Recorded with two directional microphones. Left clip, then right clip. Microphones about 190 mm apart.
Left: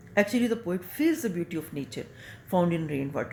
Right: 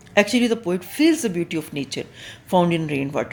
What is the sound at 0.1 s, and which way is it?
Speech, 40° right (ahead or behind).